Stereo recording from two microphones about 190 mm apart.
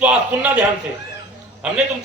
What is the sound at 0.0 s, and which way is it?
Speech, 5° right (ahead or behind).